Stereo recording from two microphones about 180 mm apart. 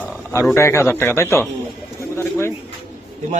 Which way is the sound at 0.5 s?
15° left (ahead or behind).